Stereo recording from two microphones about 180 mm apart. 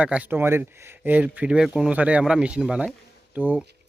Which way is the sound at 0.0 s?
10° right (ahead or behind).